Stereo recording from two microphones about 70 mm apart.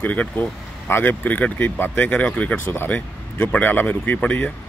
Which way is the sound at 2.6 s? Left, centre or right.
Left.